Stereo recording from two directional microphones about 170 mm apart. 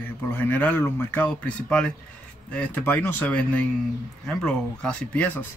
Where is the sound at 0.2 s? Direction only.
10° left (ahead or behind).